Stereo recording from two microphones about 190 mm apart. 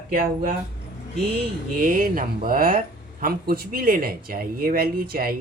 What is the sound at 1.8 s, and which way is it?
Speech, 45° right (ahead or behind).